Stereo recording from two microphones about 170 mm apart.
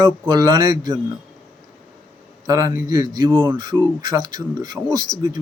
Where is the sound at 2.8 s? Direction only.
20° right (ahead or behind).